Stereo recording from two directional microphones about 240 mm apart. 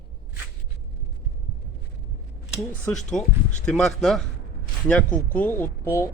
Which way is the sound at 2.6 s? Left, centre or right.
Centre.